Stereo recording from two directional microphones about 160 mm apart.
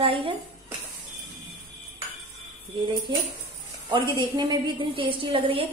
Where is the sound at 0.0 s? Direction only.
35° right (ahead or behind).